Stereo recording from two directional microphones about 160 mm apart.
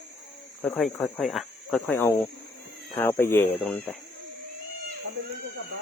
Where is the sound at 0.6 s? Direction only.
Centre (ahead or behind).